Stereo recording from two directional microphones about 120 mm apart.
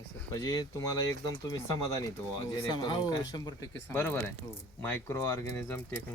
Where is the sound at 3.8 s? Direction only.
15° left (ahead or behind).